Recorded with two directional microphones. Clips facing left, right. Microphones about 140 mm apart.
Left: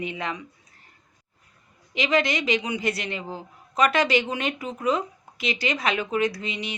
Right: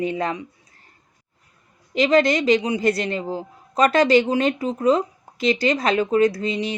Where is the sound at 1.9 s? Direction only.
40° right (ahead or behind).